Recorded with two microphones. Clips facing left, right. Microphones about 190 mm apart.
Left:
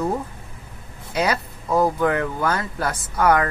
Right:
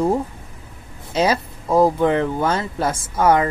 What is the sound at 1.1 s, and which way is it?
Speech, 25° right (ahead or behind).